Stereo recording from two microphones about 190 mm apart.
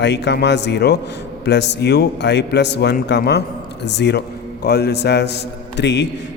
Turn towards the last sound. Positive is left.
turn(degrees=65)  # may be behind; listen again after turning